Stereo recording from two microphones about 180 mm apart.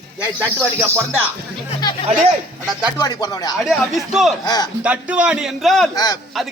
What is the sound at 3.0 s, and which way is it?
Speech, 20° left (ahead or behind).